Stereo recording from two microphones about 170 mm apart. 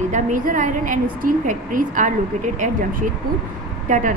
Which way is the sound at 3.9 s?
50° right (ahead or behind).